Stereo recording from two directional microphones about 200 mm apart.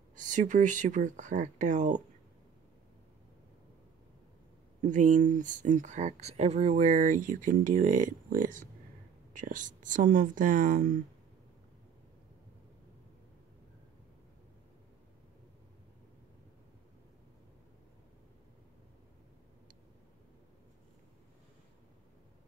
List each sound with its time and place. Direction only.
0.1 s speech: 40° right (ahead or behind)
4.8 s speech: 40° right (ahead or behind)